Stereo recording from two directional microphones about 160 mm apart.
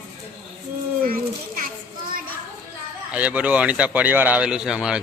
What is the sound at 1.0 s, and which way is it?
Children playing, 65° right (ahead or behind).